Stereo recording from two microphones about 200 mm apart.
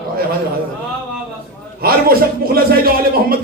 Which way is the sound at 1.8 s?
45° right (ahead or behind).